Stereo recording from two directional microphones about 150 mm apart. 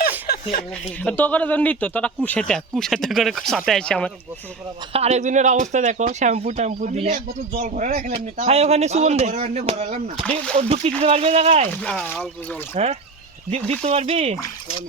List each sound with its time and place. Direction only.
1.0 s a man's voice: 10° left (ahead or behind)
4.9 s speech: 50° right (ahead or behind)
7.6 s speech: 60° right (ahead or behind)
8.1 s speech: 45° right (ahead or behind)
10.6 s speech: 45° right (ahead or behind)
11.8 s speech: 5° left (ahead or behind)
12.7 s speech: 45° right (ahead or behind)